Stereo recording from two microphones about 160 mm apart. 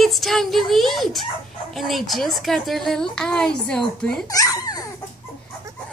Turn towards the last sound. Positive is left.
turn(degrees=25)  # may be behind; listen again after turning